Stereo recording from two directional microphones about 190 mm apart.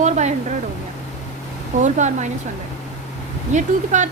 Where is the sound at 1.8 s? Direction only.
40° right (ahead or behind).